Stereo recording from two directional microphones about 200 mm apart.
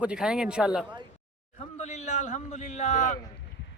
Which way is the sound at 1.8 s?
35° left (ahead or behind).